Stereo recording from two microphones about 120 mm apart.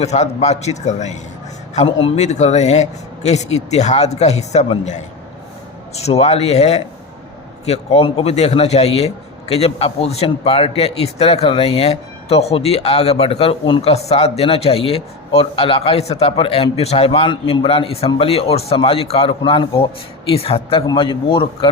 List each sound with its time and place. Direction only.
0.0 s a man's voice: 70° left (ahead or behind)
1.7 s a man's voice: 60° left (ahead or behind); by 5.0 s 75° left (ahead or behind)
5.9 s a man's voice: 60° left (ahead or behind)
13.9 s a man's voice: 60° left (ahead or behind); by 21.7 s 45° left (ahead or behind)